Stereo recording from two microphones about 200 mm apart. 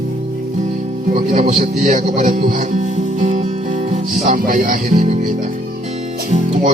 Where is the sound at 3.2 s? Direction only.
35° right (ahead or behind).